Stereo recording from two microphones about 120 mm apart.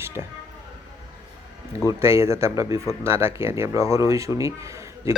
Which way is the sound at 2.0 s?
20° right (ahead or behind).